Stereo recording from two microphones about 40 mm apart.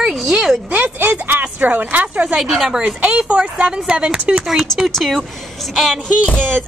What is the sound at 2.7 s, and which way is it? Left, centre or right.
Speech, right.